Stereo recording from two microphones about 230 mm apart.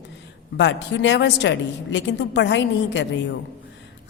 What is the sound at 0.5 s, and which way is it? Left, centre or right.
A woman's voice, left.